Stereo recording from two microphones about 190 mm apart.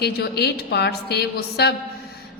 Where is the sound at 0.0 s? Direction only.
60° left (ahead or behind).